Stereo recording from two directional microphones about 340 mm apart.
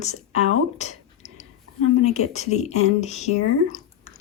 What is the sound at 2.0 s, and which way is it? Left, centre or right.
Speech, centre.